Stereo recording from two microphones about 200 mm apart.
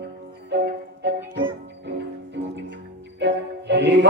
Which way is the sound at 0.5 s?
60° right (ahead or behind).